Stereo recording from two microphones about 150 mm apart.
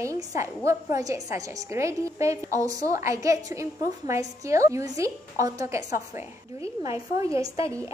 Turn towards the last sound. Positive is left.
turn(degrees=-20)  # may be behind; listen again after turning